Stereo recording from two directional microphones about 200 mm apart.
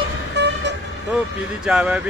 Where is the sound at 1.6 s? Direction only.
5° right (ahead or behind).